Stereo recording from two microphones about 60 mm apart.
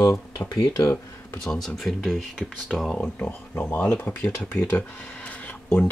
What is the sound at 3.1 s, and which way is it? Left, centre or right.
Speech, left.